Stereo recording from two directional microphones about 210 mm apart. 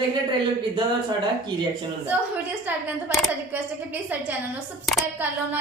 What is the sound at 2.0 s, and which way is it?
A woman's voice, 10° right (ahead or behind).